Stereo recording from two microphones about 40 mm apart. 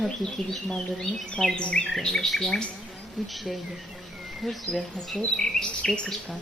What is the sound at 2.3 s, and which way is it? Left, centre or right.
Speech, centre.